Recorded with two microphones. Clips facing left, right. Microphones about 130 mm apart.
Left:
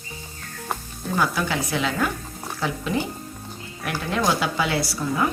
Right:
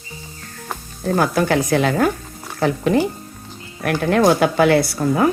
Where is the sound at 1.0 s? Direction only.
55° right (ahead or behind).